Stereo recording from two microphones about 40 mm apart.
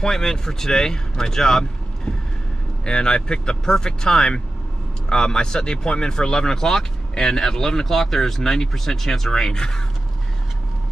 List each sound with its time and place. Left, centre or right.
0.0 s speech: centre